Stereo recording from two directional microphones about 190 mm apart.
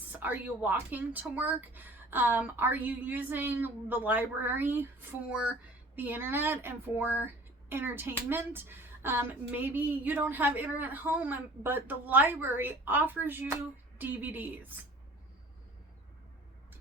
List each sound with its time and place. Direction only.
0.2 s a woman's voice: 10° right (ahead or behind)